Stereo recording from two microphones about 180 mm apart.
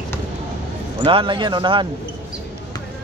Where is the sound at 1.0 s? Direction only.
30° right (ahead or behind).